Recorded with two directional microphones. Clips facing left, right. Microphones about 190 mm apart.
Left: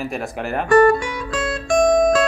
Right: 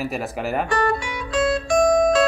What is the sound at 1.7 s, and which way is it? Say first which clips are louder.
Music: left 4 dB; 45° left (ahead or behind).